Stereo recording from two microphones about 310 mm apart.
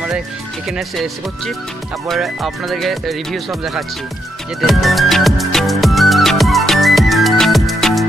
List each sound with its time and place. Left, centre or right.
0.7 s speech: centre
4.6 s music: centre